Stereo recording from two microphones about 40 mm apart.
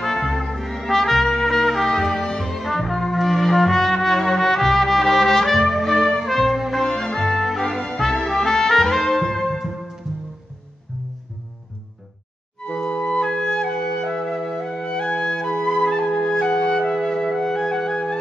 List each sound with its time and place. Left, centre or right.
0.0 s trumpet: centre
6.7 s music: centre
8.1 s trumpet: centre
12.7 s music: centre